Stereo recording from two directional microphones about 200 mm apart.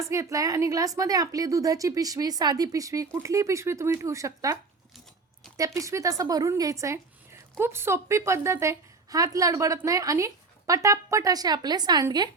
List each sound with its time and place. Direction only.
0.0 s a woman's voice: 15° right (ahead or behind)
5.5 s a woman's voice: 15° right (ahead or behind)